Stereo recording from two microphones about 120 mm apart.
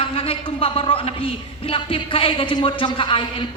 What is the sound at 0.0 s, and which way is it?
Speech, 50° left (ahead or behind).